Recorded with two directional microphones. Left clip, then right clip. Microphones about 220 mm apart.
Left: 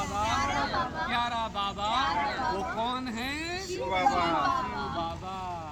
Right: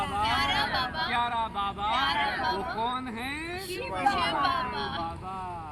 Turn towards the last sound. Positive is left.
turn(degrees=-20)  # may be behind; listen again after turning